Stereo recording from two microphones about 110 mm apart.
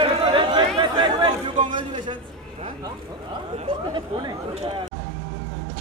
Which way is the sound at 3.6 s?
45° right (ahead or behind).